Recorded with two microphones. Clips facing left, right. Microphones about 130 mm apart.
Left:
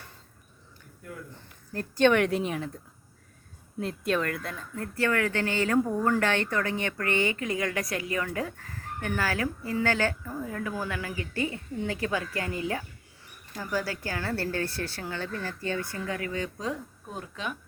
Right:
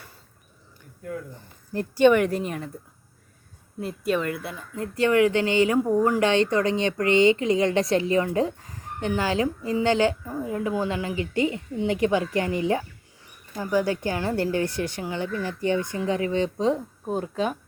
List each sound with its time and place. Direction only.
1.7 s speech: 10° right (ahead or behind)
3.8 s speech: 5° right (ahead or behind); by 17.6 s 35° right (ahead or behind)